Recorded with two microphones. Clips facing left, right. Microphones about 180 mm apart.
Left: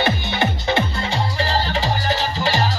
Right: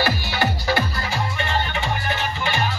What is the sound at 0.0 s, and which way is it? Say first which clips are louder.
Music: left 2 dB; 20° left (ahead or behind).